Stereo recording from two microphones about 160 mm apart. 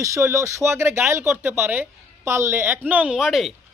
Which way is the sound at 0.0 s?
20° right (ahead or behind).